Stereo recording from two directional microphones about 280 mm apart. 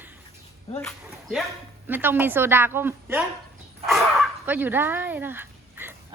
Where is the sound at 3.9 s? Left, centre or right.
Centre.